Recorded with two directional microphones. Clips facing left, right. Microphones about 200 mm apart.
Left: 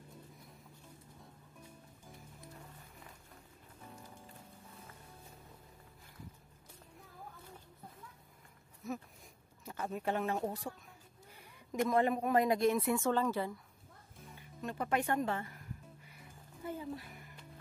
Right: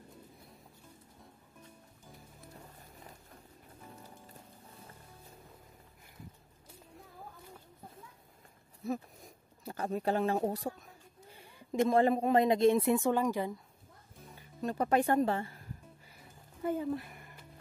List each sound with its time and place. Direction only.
8.8 s a sound: 35° right (ahead or behind)
11.2 s speech: 30° right (ahead or behind)
13.0 s speech: 15° right (ahead or behind)
14.6 s speech: 35° right (ahead or behind)
16.6 s speech: 55° right (ahead or behind)